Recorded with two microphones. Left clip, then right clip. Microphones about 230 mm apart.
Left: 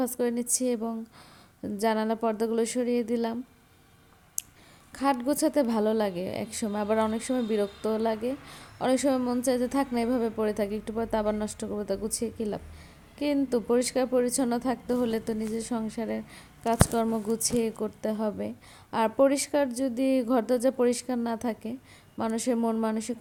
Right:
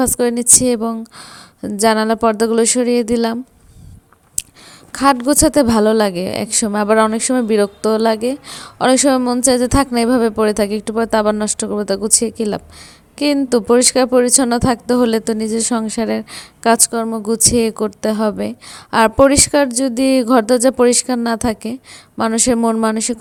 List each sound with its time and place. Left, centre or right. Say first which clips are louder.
0.0 s a woman's voice: right 12 dB; right
4.9 s a woman's voice: right 13 dB; right